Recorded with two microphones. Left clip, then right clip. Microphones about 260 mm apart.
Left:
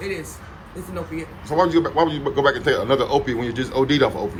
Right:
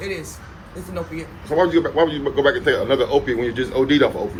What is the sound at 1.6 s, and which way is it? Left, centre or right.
A man's voice, left.